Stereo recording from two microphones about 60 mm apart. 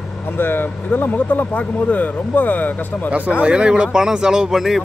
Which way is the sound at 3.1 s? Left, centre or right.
Right.